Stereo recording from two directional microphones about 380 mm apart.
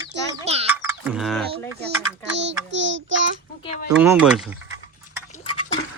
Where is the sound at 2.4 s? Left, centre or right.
Right.